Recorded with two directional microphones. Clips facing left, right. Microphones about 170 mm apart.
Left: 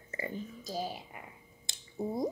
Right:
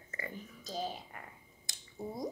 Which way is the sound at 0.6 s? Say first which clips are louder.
Right 1 dB; 10° left (ahead or behind).